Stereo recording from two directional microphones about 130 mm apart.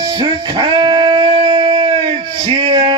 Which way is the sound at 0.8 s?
40° right (ahead or behind).